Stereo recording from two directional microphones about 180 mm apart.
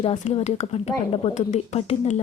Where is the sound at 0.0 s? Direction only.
30° left (ahead or behind).